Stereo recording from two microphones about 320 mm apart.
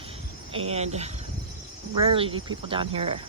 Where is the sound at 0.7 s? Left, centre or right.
Centre.